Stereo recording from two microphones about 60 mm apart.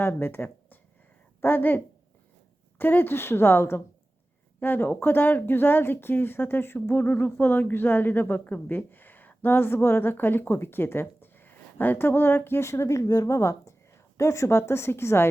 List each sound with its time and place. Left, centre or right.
0.0 s a woman's voice: left